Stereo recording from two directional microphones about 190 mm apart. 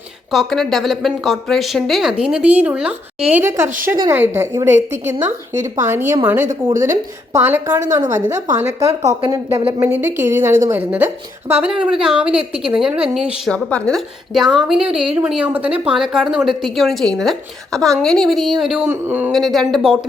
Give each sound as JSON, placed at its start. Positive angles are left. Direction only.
{"t": 0.3, "sound": "a woman's voice", "side_deg": 0}
{"t": 19.3, "sound": "a woman's voice", "side_deg": 0}